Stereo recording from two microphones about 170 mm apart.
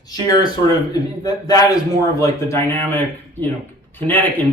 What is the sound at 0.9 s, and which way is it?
Speech, 25° left (ahead or behind).